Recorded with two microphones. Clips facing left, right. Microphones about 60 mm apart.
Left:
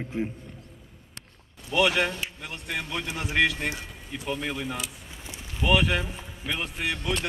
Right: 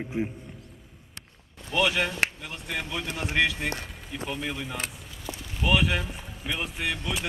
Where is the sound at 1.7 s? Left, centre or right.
Centre.